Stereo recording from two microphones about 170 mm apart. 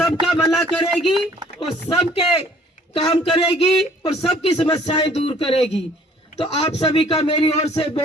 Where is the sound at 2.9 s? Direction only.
35° left (ahead or behind).